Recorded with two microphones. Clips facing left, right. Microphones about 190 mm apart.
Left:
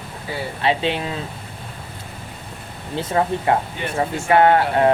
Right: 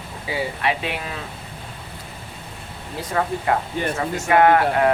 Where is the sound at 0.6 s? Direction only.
30° left (ahead or behind).